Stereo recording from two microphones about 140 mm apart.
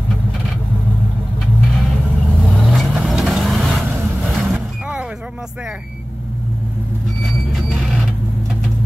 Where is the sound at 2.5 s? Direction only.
Centre (ahead or behind).